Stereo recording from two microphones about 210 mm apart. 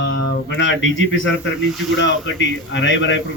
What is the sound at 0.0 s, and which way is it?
A man's voice, 60° left (ahead or behind).